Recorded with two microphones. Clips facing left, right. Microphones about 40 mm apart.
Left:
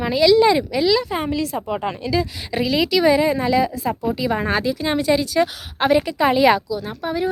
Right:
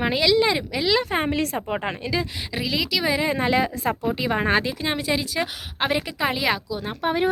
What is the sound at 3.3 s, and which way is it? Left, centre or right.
Speech, right.